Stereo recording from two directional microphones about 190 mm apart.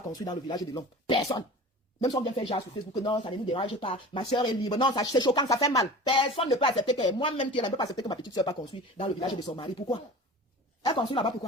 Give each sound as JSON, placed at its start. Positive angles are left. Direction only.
{"t": 0.1, "sound": "speech", "side_deg": 20}
{"t": 5.8, "sound": "speech", "side_deg": 30}